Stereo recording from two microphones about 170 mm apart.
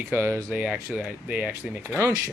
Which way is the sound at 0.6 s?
5° right (ahead or behind).